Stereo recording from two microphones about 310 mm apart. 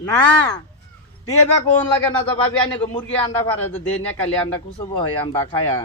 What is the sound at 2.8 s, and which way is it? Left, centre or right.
Speech, centre.